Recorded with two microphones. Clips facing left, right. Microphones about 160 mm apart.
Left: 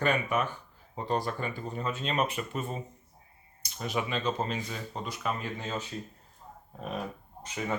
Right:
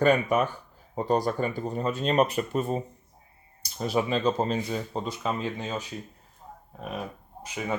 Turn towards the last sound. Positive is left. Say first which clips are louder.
# right 2 dB
turn(degrees=-10)  # may be behind; listen again after turning